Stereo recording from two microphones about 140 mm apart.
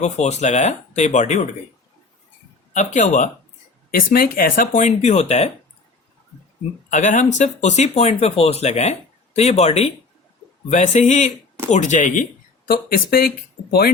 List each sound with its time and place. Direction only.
0.0 s speech: 55° left (ahead or behind)
2.7 s speech: 60° left (ahead or behind)
3.9 s speech: 90° left; by 5.5 s 50° left (ahead or behind)
6.9 s speech: 60° left (ahead or behind)
12.6 s speech: 90° left